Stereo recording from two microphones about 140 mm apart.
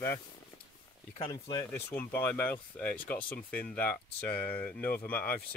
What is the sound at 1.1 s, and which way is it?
Speech, 30° left (ahead or behind).